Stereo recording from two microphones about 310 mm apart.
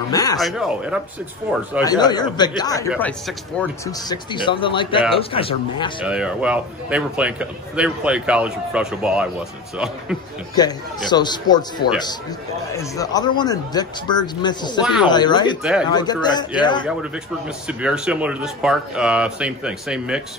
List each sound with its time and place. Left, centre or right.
0.1 s speech: centre
0.4 s speech: centre
1.8 s speech: centre
3.8 s speech: centre
6.0 s speech: centre
10.5 s speech: centre
17.6 s speech: centre